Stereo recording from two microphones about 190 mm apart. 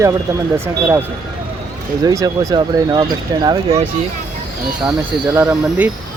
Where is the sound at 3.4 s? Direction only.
35° right (ahead or behind).